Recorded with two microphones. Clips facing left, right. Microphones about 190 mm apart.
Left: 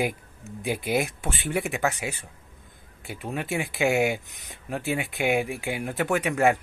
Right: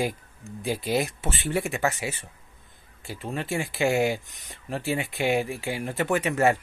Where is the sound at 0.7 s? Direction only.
15° left (ahead or behind).